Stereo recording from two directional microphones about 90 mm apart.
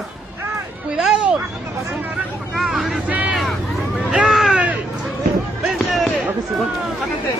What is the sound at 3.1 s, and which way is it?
Vehicle, 15° right (ahead or behind).